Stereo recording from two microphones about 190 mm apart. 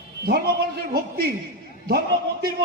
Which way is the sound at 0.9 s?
55° right (ahead or behind).